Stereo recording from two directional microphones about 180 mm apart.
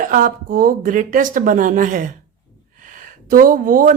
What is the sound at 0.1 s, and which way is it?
A woman's voice, 50° right (ahead or behind).